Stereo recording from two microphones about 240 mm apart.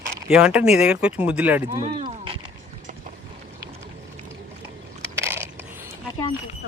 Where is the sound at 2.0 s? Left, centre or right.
Right.